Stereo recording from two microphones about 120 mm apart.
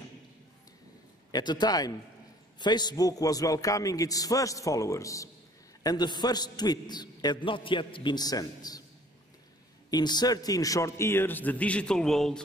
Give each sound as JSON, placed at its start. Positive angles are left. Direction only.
{"t": 1.3, "sound": "a man's voice", "side_deg": 35}
{"t": 9.8, "sound": "a man's voice", "side_deg": 35}